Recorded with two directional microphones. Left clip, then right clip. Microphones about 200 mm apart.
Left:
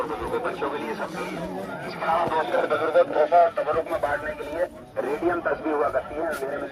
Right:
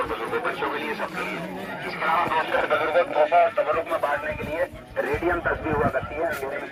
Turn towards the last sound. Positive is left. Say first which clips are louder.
# even
turn(degrees=35)  # may be behind; listen again after turning